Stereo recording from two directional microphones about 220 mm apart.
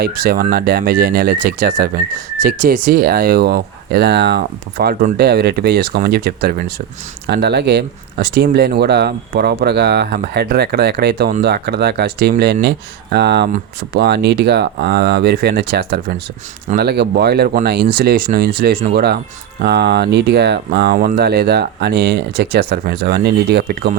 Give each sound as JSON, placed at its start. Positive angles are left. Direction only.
{"t": 0.0, "sound": "speech", "side_deg": -45}